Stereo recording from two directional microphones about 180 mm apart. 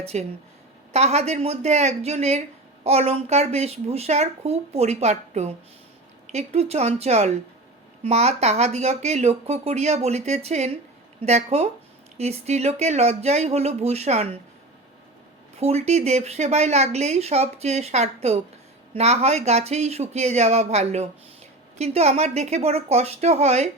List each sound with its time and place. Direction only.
0.0 s speech: 35° right (ahead or behind)
15.6 s speech: 35° right (ahead or behind)